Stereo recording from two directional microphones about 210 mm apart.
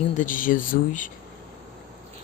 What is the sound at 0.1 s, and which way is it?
Speech, 40° left (ahead or behind).